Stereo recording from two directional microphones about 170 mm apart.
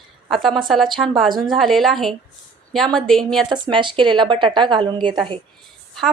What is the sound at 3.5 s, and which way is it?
Speech, 30° right (ahead or behind).